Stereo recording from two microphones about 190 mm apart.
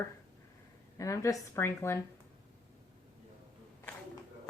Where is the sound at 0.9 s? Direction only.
15° left (ahead or behind).